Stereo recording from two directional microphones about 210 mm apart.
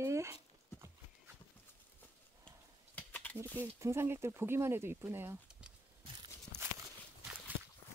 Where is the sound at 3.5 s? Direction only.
10° right (ahead or behind).